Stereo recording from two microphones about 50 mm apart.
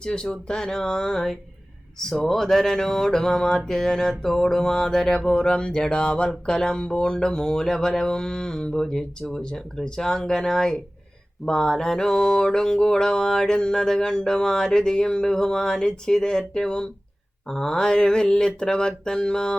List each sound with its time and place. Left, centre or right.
0.0 s mantra: centre